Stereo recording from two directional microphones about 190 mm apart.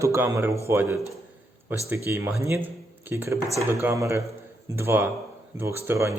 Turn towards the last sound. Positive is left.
turn(degrees=-15)  # may be behind; listen again after turning